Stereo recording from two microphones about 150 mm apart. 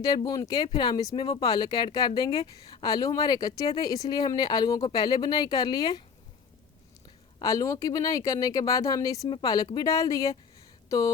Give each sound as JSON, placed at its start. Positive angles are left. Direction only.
{"t": 0.0, "sound": "speech", "side_deg": 25}
{"t": 7.3, "sound": "speech", "side_deg": 20}